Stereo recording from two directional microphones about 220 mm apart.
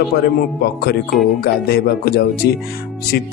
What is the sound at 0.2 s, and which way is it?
Speech, 45° left (ahead or behind).